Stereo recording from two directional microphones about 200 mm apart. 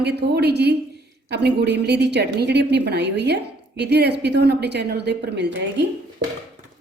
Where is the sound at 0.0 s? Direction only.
55° right (ahead or behind).